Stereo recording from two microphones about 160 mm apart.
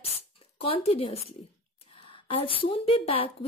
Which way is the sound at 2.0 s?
35° left (ahead or behind).